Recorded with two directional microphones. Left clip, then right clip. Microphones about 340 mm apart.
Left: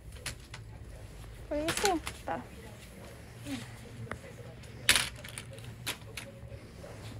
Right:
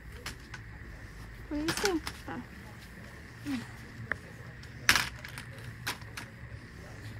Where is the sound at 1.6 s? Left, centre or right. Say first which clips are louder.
Even; centre.